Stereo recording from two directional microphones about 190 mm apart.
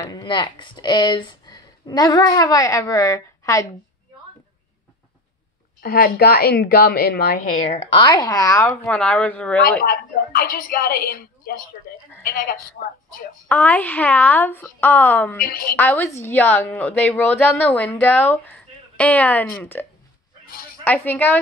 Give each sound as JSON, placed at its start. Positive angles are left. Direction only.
{"t": 0.1, "sound": "speech", "side_deg": 25}
{"t": 5.8, "sound": "a woman's voice", "side_deg": 50}
{"t": 7.5, "sound": "a woman's voice", "side_deg": 35}
{"t": 9.8, "sound": "a woman's voice", "side_deg": 50}
{"t": 13.5, "sound": "a woman's voice", "side_deg": 10}
{"t": 15.4, "sound": "a woman's voice", "side_deg": 50}
{"t": 15.7, "sound": "a woman's voice", "side_deg": 10}